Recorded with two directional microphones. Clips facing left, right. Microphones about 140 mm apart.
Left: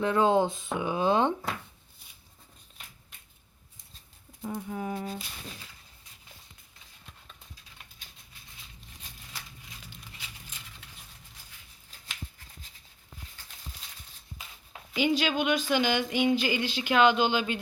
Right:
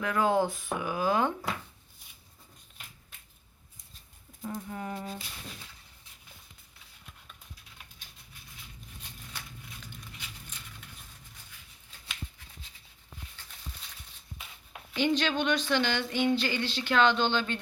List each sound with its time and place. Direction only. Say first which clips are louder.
0.0 s speech: left 3 dB; 25° left (ahead or behind)
4.4 s speech: left 3 dB; 5° left (ahead or behind)
14.9 s a sound: left 1 dB; 10° left (ahead or behind)